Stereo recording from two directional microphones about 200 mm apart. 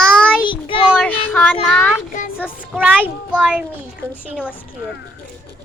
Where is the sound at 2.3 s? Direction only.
5° right (ahead or behind).